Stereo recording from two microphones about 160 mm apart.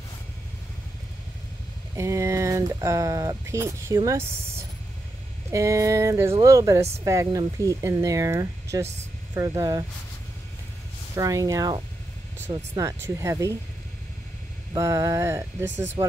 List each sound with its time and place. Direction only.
2.0 s speech: 20° right (ahead or behind)
11.1 s speech: 20° right (ahead or behind)
14.7 s speech: 20° right (ahead or behind)